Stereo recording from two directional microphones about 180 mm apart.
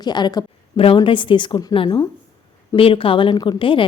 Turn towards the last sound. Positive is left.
turn(degrees=30)  # may be behind; listen again after turning